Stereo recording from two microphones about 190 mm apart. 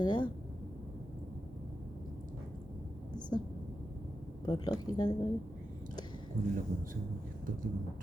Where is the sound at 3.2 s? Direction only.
20° left (ahead or behind).